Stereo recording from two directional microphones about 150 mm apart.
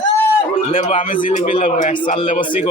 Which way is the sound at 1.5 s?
40° left (ahead or behind).